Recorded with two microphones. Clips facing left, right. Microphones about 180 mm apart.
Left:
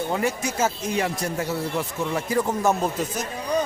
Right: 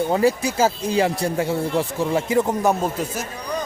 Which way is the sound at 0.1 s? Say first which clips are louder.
Right 6 dB; 35° right (ahead or behind).